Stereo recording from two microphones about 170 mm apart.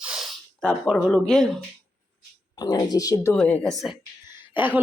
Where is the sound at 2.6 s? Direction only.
25° left (ahead or behind).